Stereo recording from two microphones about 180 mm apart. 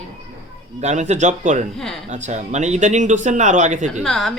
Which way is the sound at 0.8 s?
40° right (ahead or behind).